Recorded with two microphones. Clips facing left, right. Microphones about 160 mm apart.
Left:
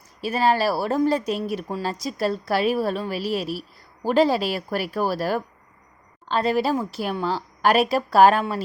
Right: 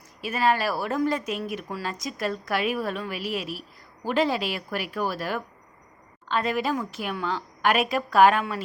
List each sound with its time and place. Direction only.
0.2 s speech: 30° left (ahead or behind)